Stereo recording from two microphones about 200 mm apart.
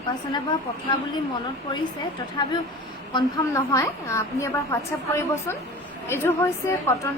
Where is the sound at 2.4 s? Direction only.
20° left (ahead or behind).